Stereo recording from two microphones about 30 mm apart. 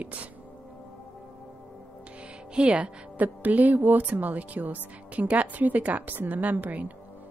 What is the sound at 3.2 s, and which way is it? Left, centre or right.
Speech, right.